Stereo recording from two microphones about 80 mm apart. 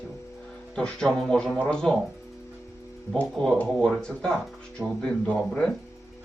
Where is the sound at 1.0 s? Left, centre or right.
Centre.